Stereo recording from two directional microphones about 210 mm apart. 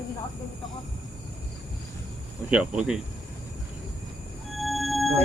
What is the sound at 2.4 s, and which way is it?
Speech, 5° right (ahead or behind).